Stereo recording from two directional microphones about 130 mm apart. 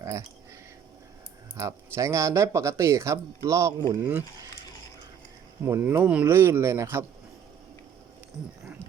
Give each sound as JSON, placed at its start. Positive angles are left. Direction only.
{"t": 0.0, "sound": "speech", "side_deg": -25}
{"t": 1.5, "sound": "speech", "side_deg": -20}
{"t": 5.6, "sound": "speech", "side_deg": -20}